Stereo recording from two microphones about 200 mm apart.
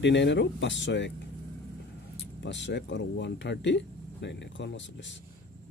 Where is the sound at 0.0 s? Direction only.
60° left (ahead or behind).